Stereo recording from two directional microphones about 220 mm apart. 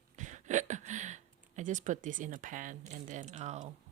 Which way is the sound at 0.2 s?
35° right (ahead or behind).